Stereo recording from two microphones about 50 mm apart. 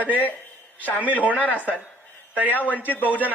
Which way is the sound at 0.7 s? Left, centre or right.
Left.